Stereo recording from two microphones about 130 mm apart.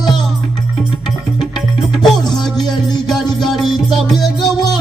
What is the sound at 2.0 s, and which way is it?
Music, centre (ahead or behind).